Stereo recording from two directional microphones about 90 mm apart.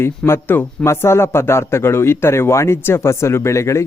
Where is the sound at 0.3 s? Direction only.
25° left (ahead or behind).